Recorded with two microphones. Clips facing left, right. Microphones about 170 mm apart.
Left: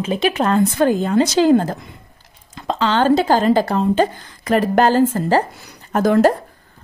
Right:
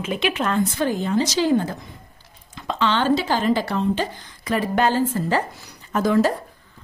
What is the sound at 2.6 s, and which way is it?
A woman's voice, 35° left (ahead or behind).